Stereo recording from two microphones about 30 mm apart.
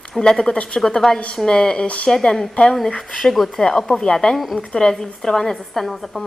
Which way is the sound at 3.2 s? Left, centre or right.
Centre.